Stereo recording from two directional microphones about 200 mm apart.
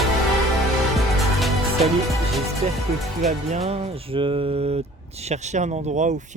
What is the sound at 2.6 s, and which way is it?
Speech, 30° right (ahead or behind).